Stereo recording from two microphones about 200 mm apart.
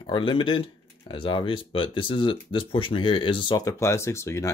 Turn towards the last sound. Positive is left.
turn(degrees=15)  # may be behind; listen again after turning